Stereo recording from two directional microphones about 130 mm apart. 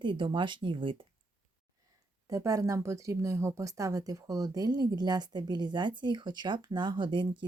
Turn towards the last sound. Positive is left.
turn(degrees=-40)  # may be behind; listen again after turning